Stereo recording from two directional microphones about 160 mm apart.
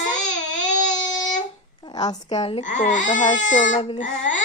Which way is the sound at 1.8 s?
25° left (ahead or behind).